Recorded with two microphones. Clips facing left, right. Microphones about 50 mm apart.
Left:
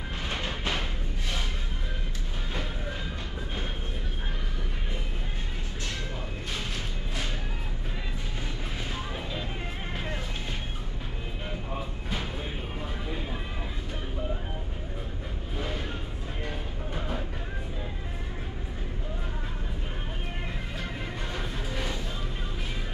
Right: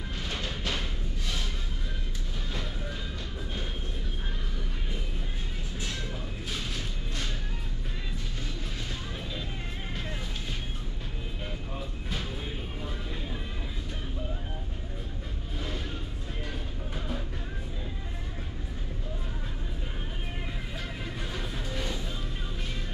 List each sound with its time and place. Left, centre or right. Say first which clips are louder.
0.3 s a sound: left 2 dB; left
15.5 s music: left 3 dB; centre
21.3 s music: left 1 dB; centre